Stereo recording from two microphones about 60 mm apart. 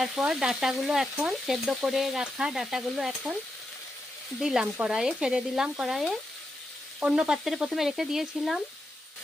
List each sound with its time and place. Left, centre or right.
0.0 s frying: centre
4.4 s frying: centre